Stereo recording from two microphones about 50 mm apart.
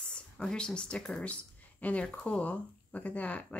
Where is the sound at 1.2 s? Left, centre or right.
Left.